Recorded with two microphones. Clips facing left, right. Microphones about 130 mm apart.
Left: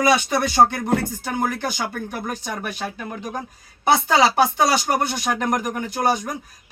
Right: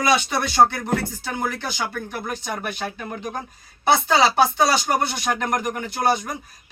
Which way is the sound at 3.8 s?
10° left (ahead or behind).